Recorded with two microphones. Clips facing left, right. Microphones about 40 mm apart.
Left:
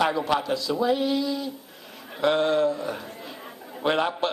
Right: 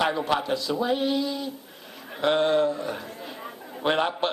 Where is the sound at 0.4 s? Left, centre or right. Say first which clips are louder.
Left 2 dB; right.